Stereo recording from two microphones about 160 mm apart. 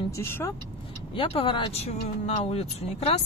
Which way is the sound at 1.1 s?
35° left (ahead or behind).